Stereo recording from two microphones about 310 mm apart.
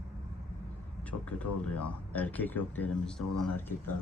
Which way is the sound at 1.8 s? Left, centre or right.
Centre.